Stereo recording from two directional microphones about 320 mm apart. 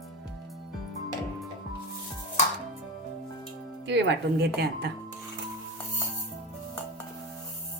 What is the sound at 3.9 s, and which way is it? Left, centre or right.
Music, right.